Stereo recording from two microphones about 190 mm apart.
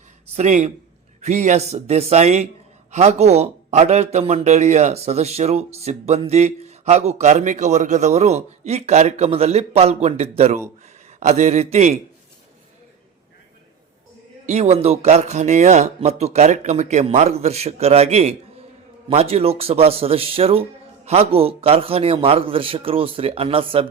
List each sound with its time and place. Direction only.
0.3 s a man's voice: 40° right (ahead or behind)
14.4 s a man's voice: 35° right (ahead or behind)